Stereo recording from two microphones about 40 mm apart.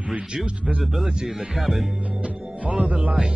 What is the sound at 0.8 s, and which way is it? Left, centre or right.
Speech, centre.